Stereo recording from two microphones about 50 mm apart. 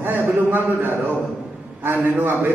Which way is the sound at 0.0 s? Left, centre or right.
Right.